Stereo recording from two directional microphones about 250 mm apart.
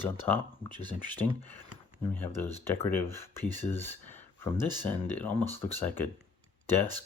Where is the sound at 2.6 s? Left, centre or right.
Centre.